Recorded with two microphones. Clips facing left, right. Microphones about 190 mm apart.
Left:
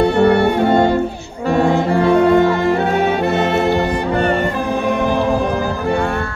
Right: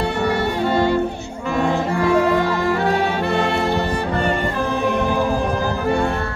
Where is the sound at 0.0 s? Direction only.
55° left (ahead or behind).